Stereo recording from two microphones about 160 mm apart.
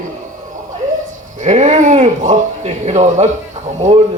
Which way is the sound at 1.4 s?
50° right (ahead or behind).